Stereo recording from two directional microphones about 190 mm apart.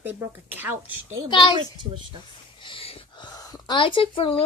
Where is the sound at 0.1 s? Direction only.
10° right (ahead or behind).